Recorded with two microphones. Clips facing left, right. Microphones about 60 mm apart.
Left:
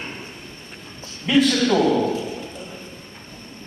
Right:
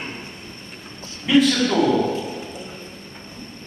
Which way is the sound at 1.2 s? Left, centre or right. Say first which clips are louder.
Right 1 dB; centre.